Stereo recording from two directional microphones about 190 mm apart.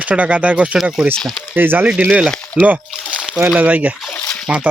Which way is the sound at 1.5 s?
10° right (ahead or behind).